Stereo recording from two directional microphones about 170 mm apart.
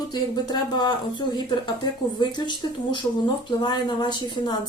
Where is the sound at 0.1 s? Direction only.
25° left (ahead or behind).